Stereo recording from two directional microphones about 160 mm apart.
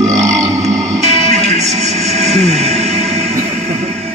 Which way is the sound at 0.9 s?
45° right (ahead or behind).